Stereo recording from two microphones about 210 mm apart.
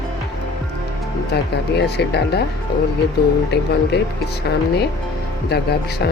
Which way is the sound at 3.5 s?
50° left (ahead or behind).